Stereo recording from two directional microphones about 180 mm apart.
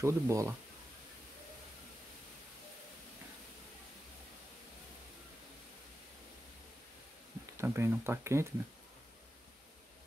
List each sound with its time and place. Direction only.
0.0 s speech: 15° right (ahead or behind)
7.5 s speech: 15° right (ahead or behind)